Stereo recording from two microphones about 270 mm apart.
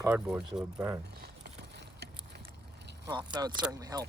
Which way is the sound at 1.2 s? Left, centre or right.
Right.